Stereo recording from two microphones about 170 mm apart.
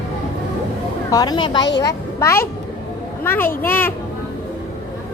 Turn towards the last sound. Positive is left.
turn(degrees=10)  # may be behind; listen again after turning